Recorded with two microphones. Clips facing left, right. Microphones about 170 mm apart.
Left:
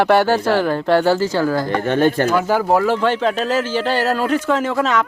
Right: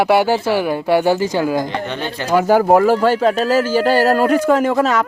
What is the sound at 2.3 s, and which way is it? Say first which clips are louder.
Speech: right 4 dB; 50° right (ahead or behind).